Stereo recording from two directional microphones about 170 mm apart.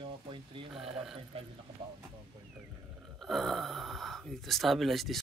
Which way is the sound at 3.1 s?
Centre (ahead or behind).